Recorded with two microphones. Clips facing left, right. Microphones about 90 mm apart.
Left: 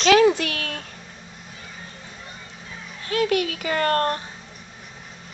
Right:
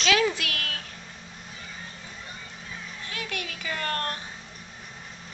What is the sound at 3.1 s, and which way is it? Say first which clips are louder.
Speech: left 15 dB; 55° left (ahead or behind).